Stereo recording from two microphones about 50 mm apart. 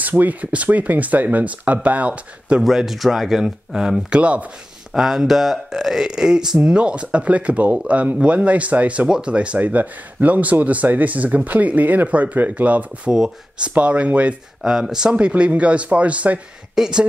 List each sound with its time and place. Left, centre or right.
0.0 s speech: right
2.6 s speech: centre
4.2 s speech: right
4.9 s speech: centre; by 13.1 s right
13.1 s speech: centre
13.7 s speech: right
14.6 s speech: centre
15.1 s speech: right
16.7 s speech: centre